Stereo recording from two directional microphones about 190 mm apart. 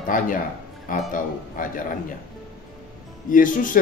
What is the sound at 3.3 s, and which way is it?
Speech, 45° left (ahead or behind).